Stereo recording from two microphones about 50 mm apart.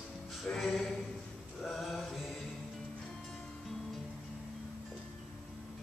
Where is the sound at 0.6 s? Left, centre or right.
Centre.